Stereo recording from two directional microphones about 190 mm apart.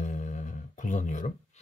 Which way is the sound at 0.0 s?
40° left (ahead or behind).